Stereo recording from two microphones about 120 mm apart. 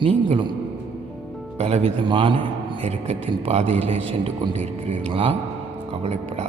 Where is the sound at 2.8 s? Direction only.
55° right (ahead or behind).